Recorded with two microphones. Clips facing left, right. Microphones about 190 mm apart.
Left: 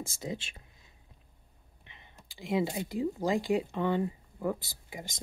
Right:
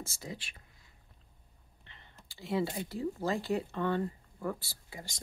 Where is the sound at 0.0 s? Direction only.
20° left (ahead or behind).